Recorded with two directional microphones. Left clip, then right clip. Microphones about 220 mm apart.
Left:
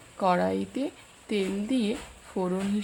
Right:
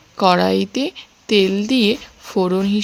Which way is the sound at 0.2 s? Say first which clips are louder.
Right 10 dB; 35° right (ahead or behind).